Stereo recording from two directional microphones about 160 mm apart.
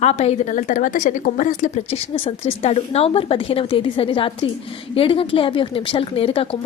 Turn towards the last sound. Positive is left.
turn(degrees=35)  # may be behind; listen again after turning